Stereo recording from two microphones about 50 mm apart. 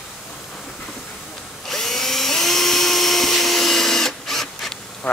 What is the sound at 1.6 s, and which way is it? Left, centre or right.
Drill, centre.